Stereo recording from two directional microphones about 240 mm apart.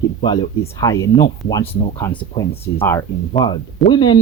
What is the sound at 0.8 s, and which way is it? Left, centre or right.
Speech, centre.